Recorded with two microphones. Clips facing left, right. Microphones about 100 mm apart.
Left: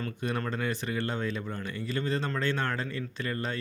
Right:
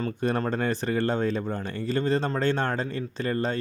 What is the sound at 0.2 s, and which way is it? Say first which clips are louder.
Speech: right 6 dB; 35° right (ahead or behind).